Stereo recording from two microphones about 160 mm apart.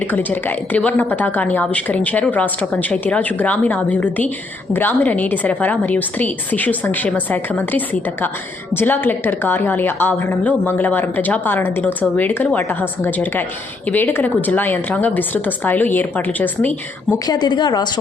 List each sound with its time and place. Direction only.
0.0 s a woman's voice: 10° left (ahead or behind)
17.2 s a woman's voice: 25° left (ahead or behind)